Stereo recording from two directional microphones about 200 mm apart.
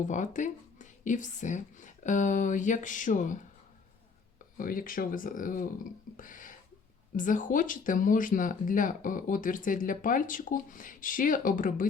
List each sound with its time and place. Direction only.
0.0 s speech: 40° left (ahead or behind)
4.5 s speech: 45° left (ahead or behind)